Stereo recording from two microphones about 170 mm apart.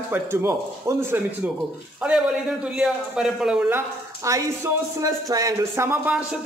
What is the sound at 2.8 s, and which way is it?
A man's voice, 5° right (ahead or behind).